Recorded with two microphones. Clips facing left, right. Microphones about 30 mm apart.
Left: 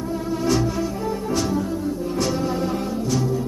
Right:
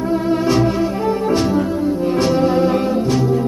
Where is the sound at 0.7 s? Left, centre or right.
Right.